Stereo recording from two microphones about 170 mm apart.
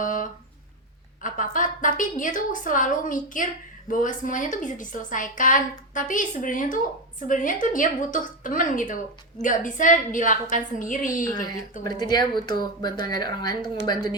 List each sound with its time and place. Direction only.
0.0 s a sound: 50° left (ahead or behind)
1.2 s a woman's voice: 50° left (ahead or behind)
11.8 s speech: 25° left (ahead or behind)